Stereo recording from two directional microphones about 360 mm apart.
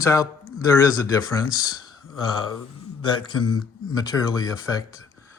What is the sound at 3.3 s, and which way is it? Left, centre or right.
Speech, left.